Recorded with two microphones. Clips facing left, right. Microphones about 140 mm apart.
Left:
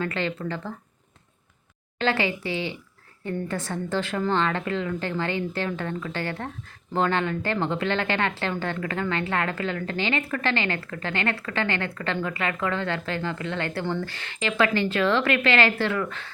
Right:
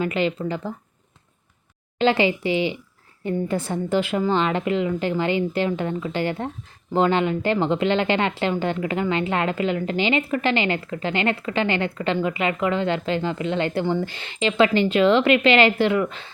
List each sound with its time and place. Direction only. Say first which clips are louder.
0.0 s speech: right 5 dB; 15° right (ahead or behind)
2.0 s speech: right 6 dB; 15° right (ahead or behind)